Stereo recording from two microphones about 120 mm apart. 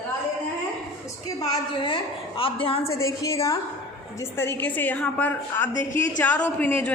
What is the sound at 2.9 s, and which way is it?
A woman's voice, 25° left (ahead or behind).